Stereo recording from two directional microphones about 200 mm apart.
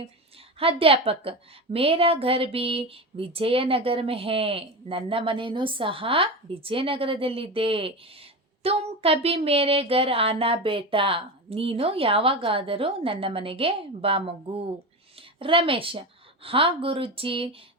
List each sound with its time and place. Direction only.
0.6 s a woman's voice: 30° right (ahead or behind)
15.4 s a woman's voice: 25° right (ahead or behind)